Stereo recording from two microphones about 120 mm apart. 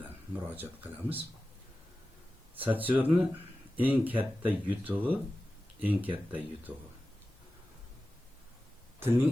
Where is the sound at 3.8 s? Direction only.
15° right (ahead or behind).